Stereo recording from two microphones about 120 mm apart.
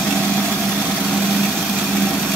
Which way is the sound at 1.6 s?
Centre (ahead or behind).